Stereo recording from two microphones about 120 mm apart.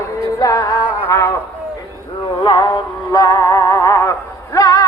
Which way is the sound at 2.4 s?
35° left (ahead or behind).